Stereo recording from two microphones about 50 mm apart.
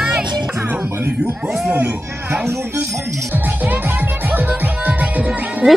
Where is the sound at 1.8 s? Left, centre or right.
Right.